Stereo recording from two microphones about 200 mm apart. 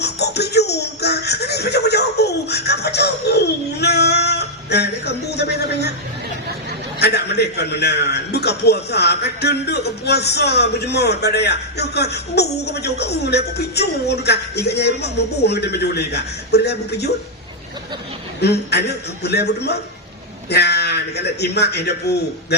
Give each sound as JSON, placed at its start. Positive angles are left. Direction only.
{"t": 0.0, "sound": "speech", "side_deg": 55}
{"t": 7.0, "sound": "a man's voice", "side_deg": 55}
{"t": 18.4, "sound": "a man's voice", "side_deg": 55}